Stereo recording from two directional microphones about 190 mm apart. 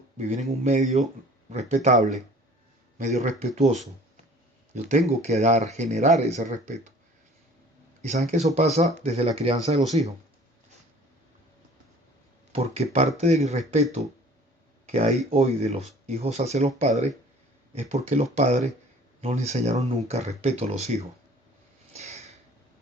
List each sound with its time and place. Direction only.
0.2 s speech: 35° right (ahead or behind)
8.0 s speech: 35° right (ahead or behind)
12.5 s speech: 35° right (ahead or behind)
14.8 s speech: 35° right (ahead or behind)
21.9 s a sound: 35° right (ahead or behind)